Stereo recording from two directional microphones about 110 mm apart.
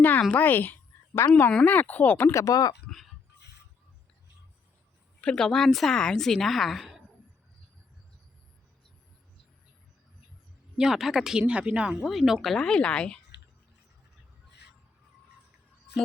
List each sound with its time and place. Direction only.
0.0 s a woman's voice: 15° left (ahead or behind); by 2.7 s 35° left (ahead or behind)
2.8 s a sound: centre (ahead or behind)
5.2 s speech: 5° left (ahead or behind)
10.8 s speech: 5° right (ahead or behind)